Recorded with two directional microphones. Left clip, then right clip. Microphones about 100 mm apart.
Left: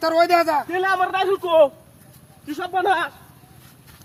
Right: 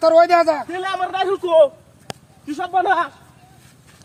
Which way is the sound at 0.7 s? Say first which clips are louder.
Left 3 dB; 15° right (ahead or behind).